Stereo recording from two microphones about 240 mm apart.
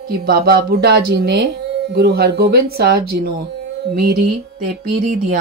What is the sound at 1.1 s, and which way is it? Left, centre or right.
Speech, right.